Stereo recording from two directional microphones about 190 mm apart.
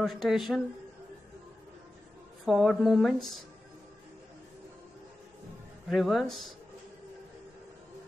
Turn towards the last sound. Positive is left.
turn(degrees=0)  # may be behind; listen again after turning